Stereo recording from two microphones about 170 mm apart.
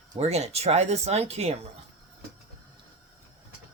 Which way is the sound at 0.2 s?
40° right (ahead or behind).